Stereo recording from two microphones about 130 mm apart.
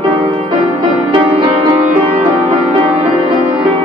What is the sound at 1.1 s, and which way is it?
Music, 40° right (ahead or behind).